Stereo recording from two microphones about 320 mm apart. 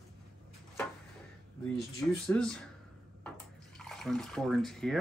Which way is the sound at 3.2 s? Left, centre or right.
Centre.